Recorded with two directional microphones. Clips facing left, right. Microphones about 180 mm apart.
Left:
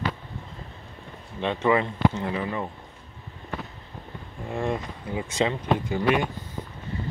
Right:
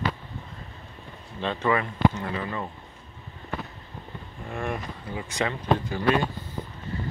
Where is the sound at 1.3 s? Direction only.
20° left (ahead or behind).